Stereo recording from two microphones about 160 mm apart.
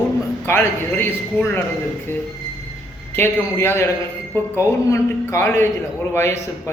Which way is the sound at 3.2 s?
15° left (ahead or behind).